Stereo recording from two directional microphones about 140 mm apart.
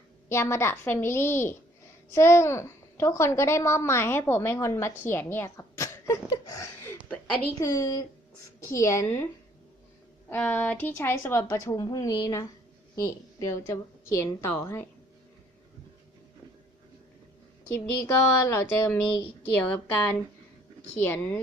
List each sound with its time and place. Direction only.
0.3 s a woman's voice: 20° left (ahead or behind)
10.2 s speech: 10° left (ahead or behind)
18.0 s a woman's voice: 20° left (ahead or behind)